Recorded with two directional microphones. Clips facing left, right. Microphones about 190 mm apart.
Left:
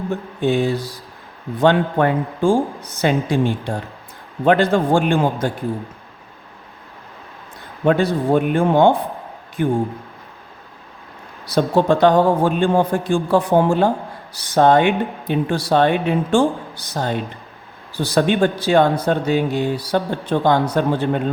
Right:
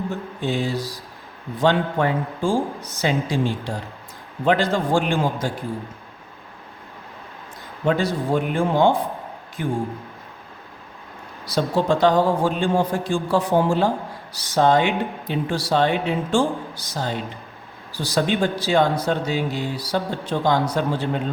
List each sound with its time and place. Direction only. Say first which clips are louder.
0.4 s speech: left 6 dB; 55° left (ahead or behind)
7.9 s speech: left 5 dB; 55° left (ahead or behind)
11.4 s speech: left 5 dB; 60° left (ahead or behind)